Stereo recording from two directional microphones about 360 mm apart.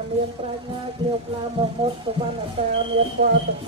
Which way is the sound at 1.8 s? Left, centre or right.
Centre.